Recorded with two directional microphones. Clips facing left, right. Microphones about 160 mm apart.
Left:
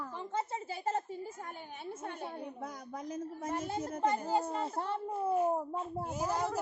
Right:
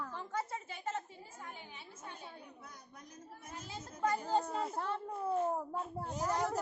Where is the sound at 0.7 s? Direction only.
35° left (ahead or behind).